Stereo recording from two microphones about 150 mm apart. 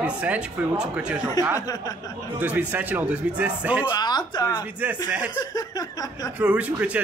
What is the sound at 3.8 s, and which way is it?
Speech, 30° left (ahead or behind).